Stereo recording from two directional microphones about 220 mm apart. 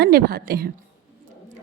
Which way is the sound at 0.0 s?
45° right (ahead or behind).